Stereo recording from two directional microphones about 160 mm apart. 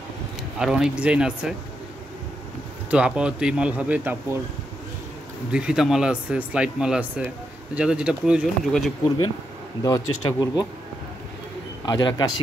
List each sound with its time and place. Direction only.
0.6 s a man's voice: 5° right (ahead or behind)
2.9 s speech: 5° right (ahead or behind)
5.5 s a man's voice: 5° right (ahead or behind)
9.8 s speech: 25° left (ahead or behind)
11.8 s speech: 30° left (ahead or behind)